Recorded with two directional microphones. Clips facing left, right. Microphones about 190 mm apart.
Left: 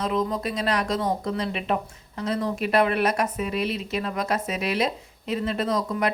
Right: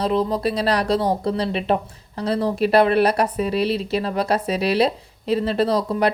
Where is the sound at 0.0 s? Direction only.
35° right (ahead or behind).